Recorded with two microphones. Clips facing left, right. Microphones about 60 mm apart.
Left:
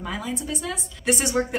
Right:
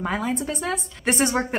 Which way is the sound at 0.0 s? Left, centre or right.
Right.